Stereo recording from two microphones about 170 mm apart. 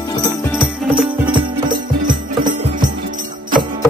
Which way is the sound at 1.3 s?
30° right (ahead or behind).